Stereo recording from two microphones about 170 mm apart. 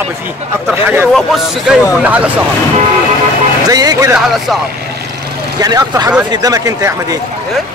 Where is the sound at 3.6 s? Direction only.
20° right (ahead or behind).